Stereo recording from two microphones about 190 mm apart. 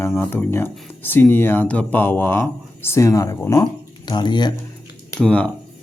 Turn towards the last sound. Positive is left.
turn(degrees=5)  # may be behind; listen again after turning